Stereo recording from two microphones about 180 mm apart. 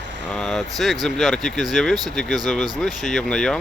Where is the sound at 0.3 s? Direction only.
5° left (ahead or behind).